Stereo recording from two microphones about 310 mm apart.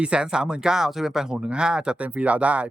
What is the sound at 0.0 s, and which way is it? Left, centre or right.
Speech, centre.